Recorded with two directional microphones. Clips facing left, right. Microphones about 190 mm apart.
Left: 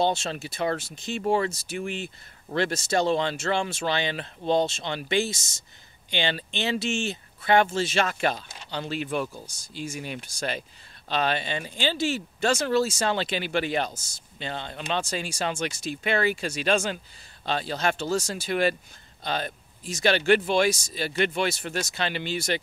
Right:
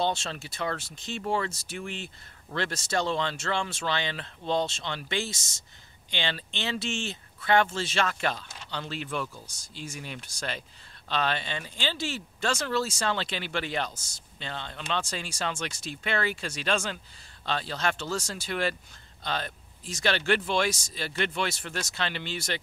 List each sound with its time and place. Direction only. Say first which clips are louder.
0.0 s speech: left 4 dB; 15° left (ahead or behind)